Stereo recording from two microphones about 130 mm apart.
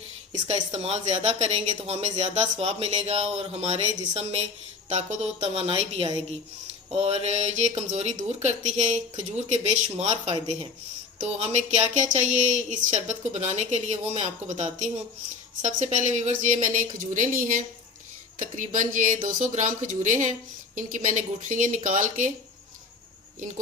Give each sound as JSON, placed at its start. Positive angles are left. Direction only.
{"t": 0.4, "sound": "a woman's voice", "side_deg": -55}